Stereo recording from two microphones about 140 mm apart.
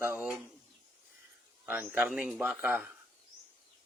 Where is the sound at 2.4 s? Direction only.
10° right (ahead or behind).